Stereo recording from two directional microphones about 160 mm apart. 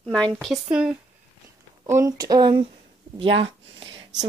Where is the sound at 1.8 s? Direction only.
20° right (ahead or behind).